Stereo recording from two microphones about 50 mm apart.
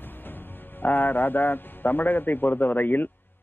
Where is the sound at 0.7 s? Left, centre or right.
Left.